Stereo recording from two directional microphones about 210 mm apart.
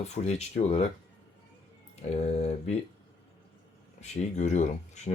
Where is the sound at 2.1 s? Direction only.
30° left (ahead or behind).